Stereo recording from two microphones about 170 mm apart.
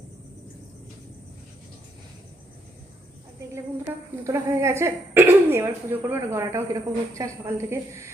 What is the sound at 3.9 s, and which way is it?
A woman's voice, 10° right (ahead or behind).